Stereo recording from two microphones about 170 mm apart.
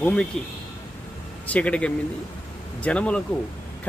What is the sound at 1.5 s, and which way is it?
Speech, 5° left (ahead or behind).